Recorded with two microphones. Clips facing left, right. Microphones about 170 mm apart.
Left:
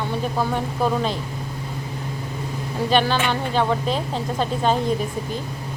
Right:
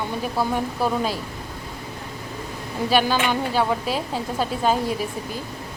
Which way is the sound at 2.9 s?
10° right (ahead or behind).